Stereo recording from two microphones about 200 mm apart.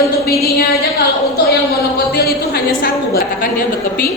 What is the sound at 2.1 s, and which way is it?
A woman's voice, 50° left (ahead or behind).